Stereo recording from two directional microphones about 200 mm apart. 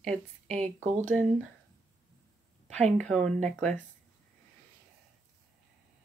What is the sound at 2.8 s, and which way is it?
Speech, 35° right (ahead or behind).